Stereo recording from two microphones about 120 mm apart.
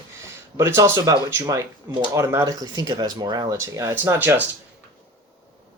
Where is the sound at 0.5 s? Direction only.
25° right (ahead or behind).